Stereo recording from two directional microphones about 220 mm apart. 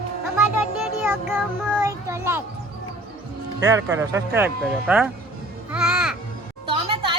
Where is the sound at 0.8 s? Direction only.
5° right (ahead or behind).